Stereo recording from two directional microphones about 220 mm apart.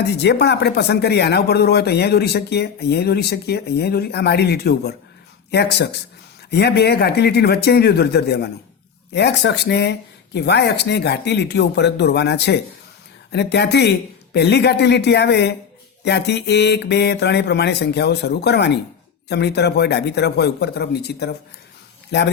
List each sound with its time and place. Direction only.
0.0 s speech: 50° left (ahead or behind)